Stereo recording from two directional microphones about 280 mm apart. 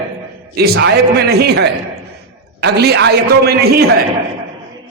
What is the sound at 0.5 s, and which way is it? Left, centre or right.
A man's voice, right.